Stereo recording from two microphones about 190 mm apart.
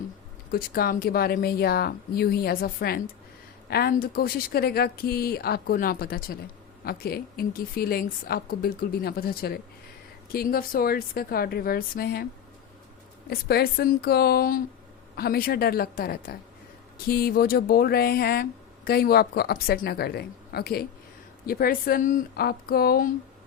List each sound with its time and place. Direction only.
0.5 s a woman's voice: 50° left (ahead or behind)
13.3 s a woman's voice: 55° left (ahead or behind)